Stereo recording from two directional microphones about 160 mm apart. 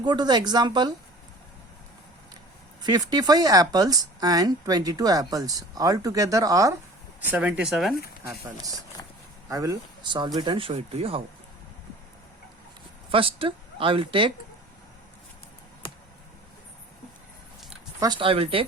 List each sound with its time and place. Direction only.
0.0 s speech: 25° right (ahead or behind)
2.8 s speech: 25° right (ahead or behind)
7.3 s speech: 10° right (ahead or behind)
9.5 s speech: 20° right (ahead or behind); by 11.2 s 35° right (ahead or behind)
13.1 s speech: 35° right (ahead or behind)
18.0 s speech: 30° right (ahead or behind)